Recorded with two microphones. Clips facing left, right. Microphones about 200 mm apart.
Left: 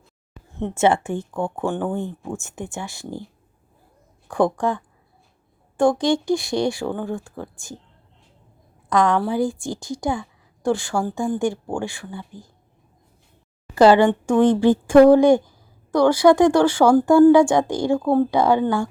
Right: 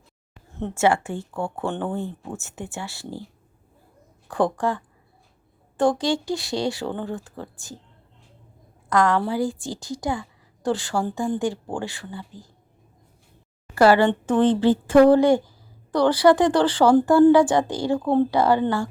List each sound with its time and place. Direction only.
0.6 s a woman's voice: 20° left (ahead or behind)
4.3 s a woman's voice: 15° left (ahead or behind)
8.9 s a woman's voice: 15° left (ahead or behind)
13.7 s a woman's voice: 20° left (ahead or behind)